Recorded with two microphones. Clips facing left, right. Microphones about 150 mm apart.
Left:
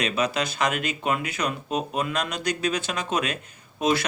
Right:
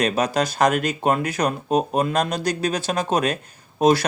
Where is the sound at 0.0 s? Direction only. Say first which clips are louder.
Right 5 dB; 40° right (ahead or behind).